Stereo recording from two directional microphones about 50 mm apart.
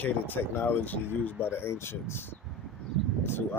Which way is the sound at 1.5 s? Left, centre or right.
Left.